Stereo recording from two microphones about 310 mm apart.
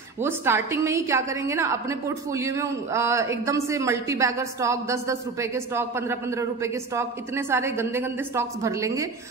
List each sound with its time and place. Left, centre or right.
0.2 s a woman's voice: centre